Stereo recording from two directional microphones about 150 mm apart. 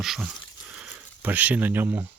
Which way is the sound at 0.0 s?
5° right (ahead or behind).